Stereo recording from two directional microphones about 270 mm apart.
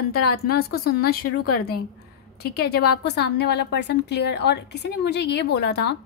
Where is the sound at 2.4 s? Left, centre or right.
Left.